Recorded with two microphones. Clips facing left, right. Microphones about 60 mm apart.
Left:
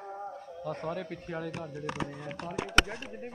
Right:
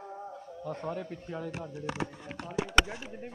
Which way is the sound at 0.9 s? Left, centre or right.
Left.